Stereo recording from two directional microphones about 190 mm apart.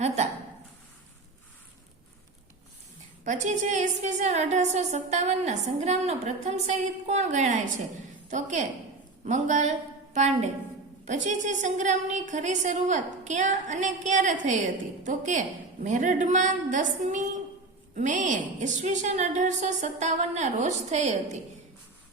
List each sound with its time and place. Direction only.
3.2 s a woman's voice: 40° right (ahead or behind)